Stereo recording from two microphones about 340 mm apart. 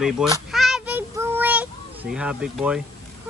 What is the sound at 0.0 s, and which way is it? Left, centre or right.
Child singing, centre.